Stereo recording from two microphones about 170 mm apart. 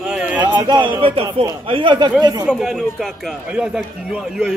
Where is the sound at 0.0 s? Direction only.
5° right (ahead or behind).